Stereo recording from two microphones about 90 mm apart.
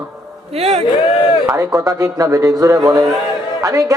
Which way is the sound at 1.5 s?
40° right (ahead or behind).